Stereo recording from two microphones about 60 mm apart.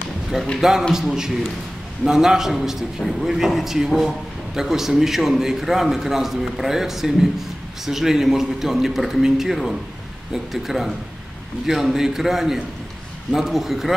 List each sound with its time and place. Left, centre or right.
0.6 s a man's voice: centre